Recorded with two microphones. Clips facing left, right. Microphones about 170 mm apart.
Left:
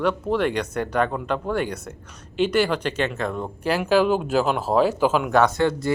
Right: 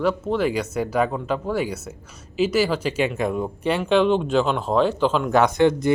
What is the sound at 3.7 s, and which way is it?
Speech, centre (ahead or behind).